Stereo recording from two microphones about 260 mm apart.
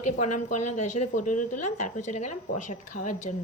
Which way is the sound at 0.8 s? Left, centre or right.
Left.